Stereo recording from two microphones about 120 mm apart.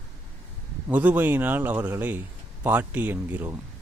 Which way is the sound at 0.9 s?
10° right (ahead or behind).